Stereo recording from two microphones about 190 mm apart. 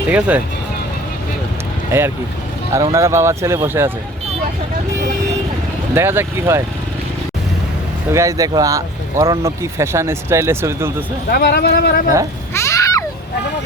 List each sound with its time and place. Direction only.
0.1 s speech: 10° right (ahead or behind)
1.9 s speech: 15° right (ahead or behind)
5.9 s speech: 10° right (ahead or behind)
8.1 s speech: 15° right (ahead or behind)
11.3 s speech: 55° left (ahead or behind)
12.5 s a sound: 15° left (ahead or behind)